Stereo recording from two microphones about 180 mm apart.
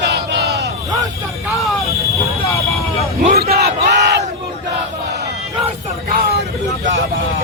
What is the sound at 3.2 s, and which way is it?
Battle cry, 55° right (ahead or behind).